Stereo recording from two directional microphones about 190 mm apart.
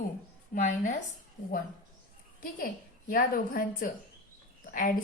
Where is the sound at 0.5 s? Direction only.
40° left (ahead or behind).